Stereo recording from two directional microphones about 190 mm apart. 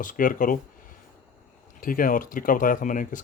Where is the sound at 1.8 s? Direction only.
45° left (ahead or behind).